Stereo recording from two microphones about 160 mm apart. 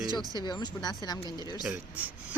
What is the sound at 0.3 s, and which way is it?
Speech, 25° left (ahead or behind).